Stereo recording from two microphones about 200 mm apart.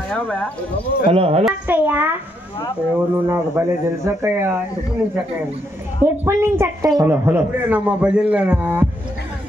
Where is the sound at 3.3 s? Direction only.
15° right (ahead or behind).